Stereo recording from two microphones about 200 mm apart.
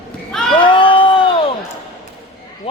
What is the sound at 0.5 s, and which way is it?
Crowd, 25° left (ahead or behind).